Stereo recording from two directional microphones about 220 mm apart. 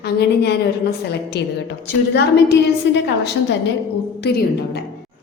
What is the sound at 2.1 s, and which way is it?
Speech, 50° left (ahead or behind).